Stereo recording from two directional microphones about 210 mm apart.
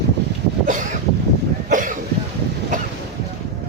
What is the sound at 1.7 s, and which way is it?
Cough, 40° right (ahead or behind).